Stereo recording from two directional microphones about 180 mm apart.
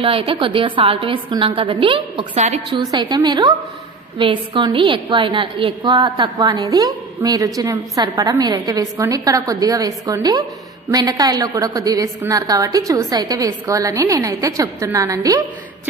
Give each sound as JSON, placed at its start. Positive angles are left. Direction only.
{"t": 0.0, "sound": "a woman's voice", "side_deg": -30}
{"t": 2.8, "sound": "a woman's voice", "side_deg": -20}